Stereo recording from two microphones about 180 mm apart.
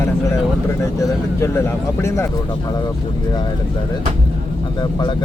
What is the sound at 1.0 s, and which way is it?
Speech, 15° left (ahead or behind).